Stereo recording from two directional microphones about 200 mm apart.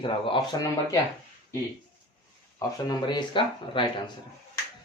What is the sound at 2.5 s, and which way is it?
A man's voice, 20° left (ahead or behind).